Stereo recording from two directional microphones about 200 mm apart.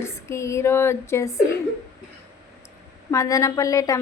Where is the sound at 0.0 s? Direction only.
15° left (ahead or behind).